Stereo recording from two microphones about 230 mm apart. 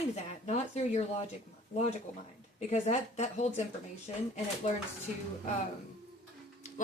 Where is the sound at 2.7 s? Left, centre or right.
Left.